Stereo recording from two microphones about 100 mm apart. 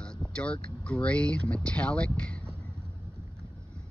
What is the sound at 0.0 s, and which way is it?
Speech, 10° left (ahead or behind).